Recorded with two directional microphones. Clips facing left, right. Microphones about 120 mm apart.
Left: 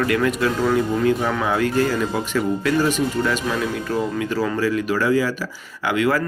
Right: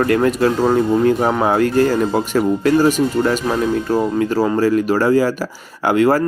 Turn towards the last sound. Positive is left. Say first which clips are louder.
# right 6 dB
turn(degrees=-40)  # may be behind; listen again after turning